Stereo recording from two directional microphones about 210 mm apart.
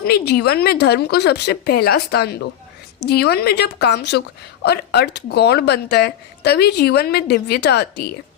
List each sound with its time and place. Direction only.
0.0 s speech: 50° left (ahead or behind)